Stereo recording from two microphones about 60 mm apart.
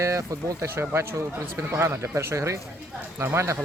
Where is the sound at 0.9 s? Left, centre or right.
Right.